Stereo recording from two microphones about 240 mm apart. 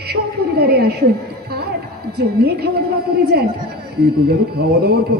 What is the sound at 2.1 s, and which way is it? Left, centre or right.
Speech, right.